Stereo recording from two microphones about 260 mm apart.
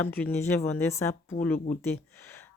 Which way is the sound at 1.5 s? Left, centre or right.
Left.